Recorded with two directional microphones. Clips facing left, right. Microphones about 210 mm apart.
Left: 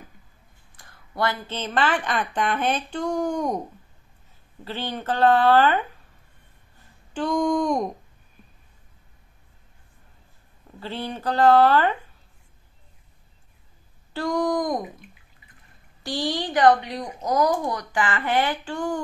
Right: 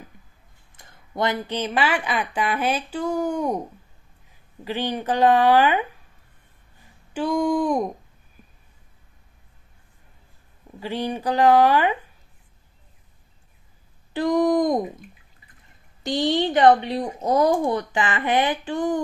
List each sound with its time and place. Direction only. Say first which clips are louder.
0.7 s a woman's voice: right 2 dB; 20° right (ahead or behind)
4.6 s a woman's voice: right 4 dB; 15° right (ahead or behind)
7.2 s a woman's voice: right 1 dB; 10° right (ahead or behind)
10.8 s a woman's voice: right 4 dB; 15° right (ahead or behind)
14.1 s speech: right 5 dB; 20° right (ahead or behind)
16.0 s speech: right 5 dB; 20° right (ahead or behind)